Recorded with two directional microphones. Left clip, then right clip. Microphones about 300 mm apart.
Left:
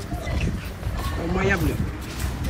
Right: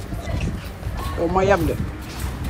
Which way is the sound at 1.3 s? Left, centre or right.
Centre.